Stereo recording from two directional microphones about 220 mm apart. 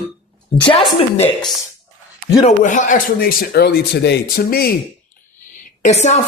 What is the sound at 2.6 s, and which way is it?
Speech, 35° left (ahead or behind).